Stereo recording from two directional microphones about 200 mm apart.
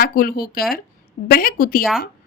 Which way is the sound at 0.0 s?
50° left (ahead or behind).